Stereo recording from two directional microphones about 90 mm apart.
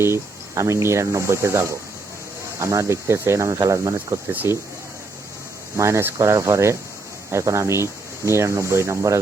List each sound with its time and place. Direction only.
0.0 s speech: 30° right (ahead or behind)
4.3 s speech: 20° right (ahead or behind)
5.7 s speech: 35° right (ahead or behind)